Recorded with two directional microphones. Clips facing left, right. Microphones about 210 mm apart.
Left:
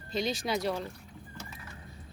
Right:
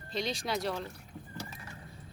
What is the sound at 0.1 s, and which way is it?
Speech, centre (ahead or behind).